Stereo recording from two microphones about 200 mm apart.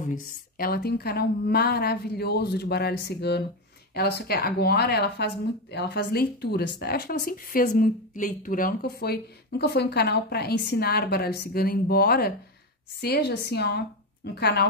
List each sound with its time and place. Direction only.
0.0 s speech: 45° left (ahead or behind)